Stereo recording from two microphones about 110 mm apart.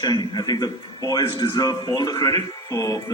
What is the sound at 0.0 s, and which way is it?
A man's voice, 40° left (ahead or behind).